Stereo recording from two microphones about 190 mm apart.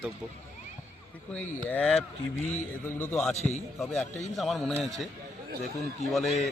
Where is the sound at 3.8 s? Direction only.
Centre (ahead or behind).